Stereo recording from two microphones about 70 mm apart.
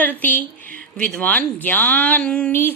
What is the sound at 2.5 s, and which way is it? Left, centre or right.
Speech, left.